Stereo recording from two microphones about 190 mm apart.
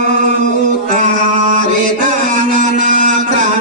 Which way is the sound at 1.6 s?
45° right (ahead or behind).